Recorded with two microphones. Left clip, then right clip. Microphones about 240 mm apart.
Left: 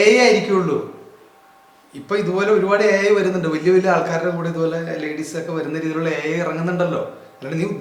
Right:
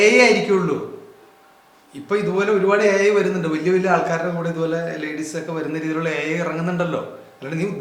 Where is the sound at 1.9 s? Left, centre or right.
Centre.